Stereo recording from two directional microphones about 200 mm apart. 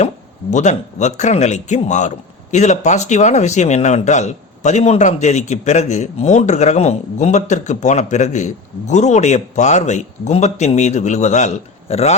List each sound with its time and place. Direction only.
0.5 s a man's voice: 35° left (ahead or behind)